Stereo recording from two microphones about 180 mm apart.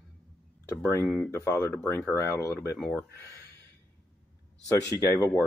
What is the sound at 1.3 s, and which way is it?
Speech, 15° left (ahead or behind).